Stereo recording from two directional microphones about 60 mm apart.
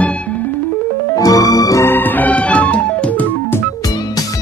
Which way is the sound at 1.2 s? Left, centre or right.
Left.